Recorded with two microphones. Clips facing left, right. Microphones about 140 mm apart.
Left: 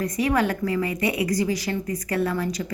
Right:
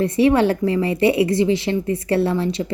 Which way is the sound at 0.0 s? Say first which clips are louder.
Right 7 dB; 30° right (ahead or behind).